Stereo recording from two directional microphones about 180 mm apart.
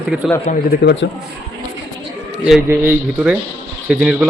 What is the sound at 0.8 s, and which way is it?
Speech, 85° left.